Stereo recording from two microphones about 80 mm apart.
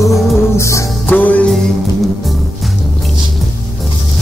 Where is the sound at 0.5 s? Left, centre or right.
Left.